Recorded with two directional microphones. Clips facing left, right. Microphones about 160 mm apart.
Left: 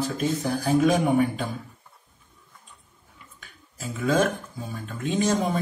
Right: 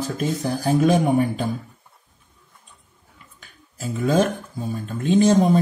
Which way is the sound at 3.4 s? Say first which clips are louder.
Right 5 dB; 35° right (ahead or behind).